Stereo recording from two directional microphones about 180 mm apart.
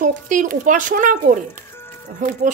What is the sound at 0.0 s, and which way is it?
Speech, 45° right (ahead or behind).